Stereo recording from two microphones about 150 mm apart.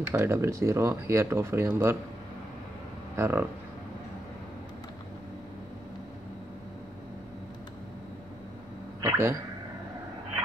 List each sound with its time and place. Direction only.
0.0 s speech: 15° right (ahead or behind)
3.2 s speech: 15° right (ahead or behind)
9.0 s a sound: 15° right (ahead or behind)